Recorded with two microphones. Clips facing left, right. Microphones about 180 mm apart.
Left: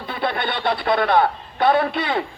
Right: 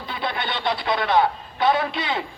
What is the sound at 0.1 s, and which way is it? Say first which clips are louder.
A man's voice: left 4 dB; 55° left (ahead or behind).